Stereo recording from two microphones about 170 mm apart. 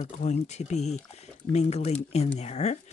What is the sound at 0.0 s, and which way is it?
Speech, 40° left (ahead or behind).